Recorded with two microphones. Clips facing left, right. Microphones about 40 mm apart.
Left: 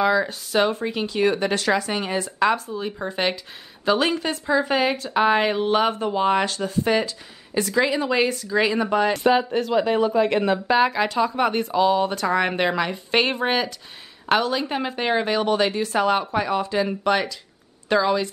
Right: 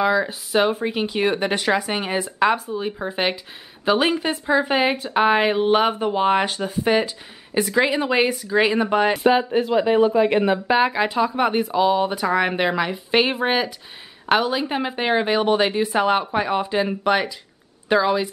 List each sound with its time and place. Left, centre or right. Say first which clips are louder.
0.0 s speech: even; centre